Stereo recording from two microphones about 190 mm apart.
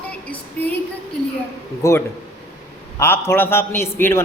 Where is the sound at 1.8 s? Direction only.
15° left (ahead or behind).